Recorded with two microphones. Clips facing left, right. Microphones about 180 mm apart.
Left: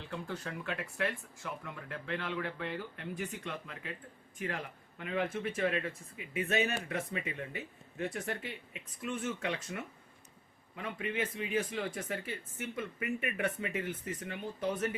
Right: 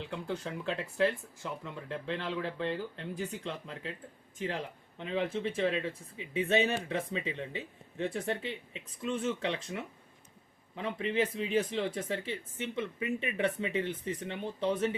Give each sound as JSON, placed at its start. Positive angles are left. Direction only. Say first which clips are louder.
{"t": 0.0, "sound": "speech", "louder": "right 4 dB", "side_deg": -20}
{"t": 4.9, "sound": "speech", "louder": "right 2 dB", "side_deg": -25}
{"t": 10.8, "sound": "speech", "louder": "right 5 dB", "side_deg": -30}